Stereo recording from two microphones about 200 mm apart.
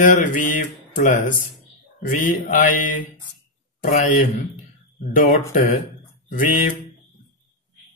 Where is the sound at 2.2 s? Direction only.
40° left (ahead or behind).